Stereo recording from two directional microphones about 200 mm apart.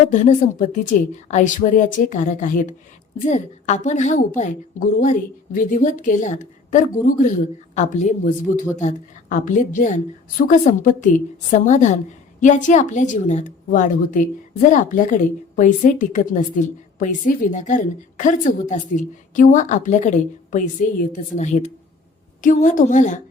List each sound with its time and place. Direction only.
0.1 s a woman's voice: 40° left (ahead or behind)